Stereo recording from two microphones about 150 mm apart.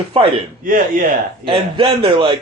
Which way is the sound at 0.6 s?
70° right (ahead or behind).